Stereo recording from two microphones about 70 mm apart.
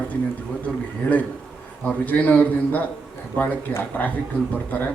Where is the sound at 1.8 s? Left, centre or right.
Left.